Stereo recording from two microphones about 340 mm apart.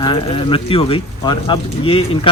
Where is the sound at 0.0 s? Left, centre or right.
Centre.